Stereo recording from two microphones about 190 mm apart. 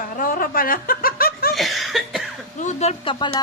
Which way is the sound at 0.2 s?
50° left (ahead or behind).